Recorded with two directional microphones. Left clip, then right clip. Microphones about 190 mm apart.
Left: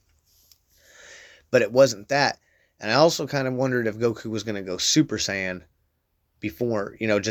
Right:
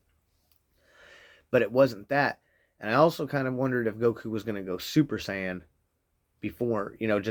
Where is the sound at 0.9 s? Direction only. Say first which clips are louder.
Left 6 dB; 35° left (ahead or behind).